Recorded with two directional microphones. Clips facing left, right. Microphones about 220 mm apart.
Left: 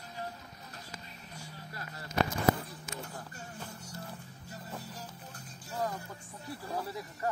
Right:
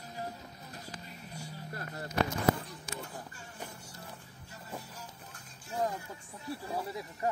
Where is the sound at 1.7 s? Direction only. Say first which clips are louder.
Right 5 dB; 50° right (ahead or behind).